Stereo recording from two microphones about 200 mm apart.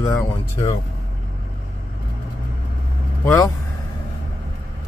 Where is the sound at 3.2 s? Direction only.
10° left (ahead or behind).